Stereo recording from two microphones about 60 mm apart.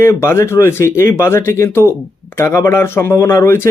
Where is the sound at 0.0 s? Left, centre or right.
Left.